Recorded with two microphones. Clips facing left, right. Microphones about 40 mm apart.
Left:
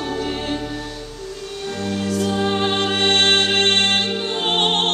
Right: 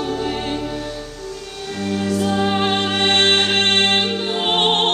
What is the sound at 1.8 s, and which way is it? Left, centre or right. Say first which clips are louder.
Music: right 2 dB; centre.